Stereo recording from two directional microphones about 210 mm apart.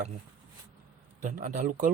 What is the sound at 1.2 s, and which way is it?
Speech, 40° right (ahead or behind).